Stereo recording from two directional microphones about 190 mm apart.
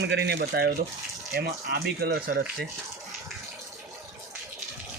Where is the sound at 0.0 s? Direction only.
60° right (ahead or behind).